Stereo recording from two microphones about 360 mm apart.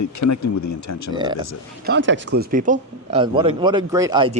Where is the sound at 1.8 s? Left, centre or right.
Right.